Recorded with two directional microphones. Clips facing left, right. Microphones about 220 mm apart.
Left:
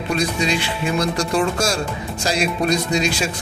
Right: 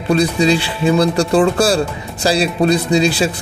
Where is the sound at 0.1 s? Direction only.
35° right (ahead or behind).